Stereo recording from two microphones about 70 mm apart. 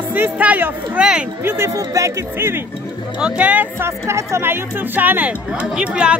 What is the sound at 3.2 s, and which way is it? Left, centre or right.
Speech, centre.